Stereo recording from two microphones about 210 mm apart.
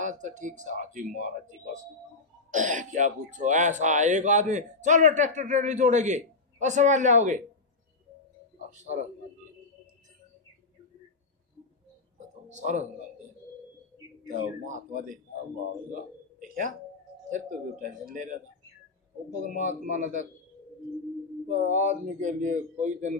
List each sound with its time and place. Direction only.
0.0 s speech: 35° right (ahead or behind)
8.7 s speech: 35° right (ahead or behind)
12.5 s speech: 35° right (ahead or behind)
14.3 s speech: 40° right (ahead or behind)
16.4 s a sound: 35° right (ahead or behind)
17.2 s speech: 40° right (ahead or behind)
19.5 s speech: 35° right (ahead or behind)
21.4 s speech: 35° right (ahead or behind)